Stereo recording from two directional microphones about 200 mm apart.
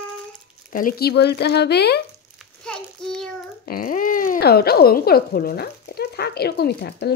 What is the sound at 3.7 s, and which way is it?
Speech, 45° left (ahead or behind).